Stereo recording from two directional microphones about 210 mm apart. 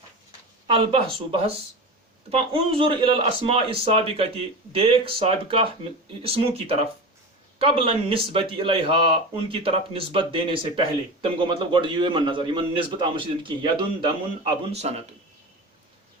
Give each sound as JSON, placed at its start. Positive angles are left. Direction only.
{"t": 0.7, "sound": "speech", "side_deg": -25}